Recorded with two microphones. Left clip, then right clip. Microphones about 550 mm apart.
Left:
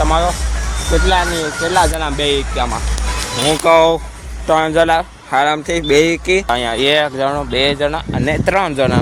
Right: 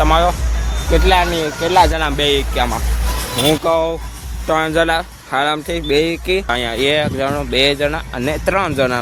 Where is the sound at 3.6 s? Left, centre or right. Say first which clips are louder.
Left 6 dB; right.